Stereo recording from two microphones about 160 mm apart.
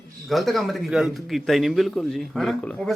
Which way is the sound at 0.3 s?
Centre (ahead or behind).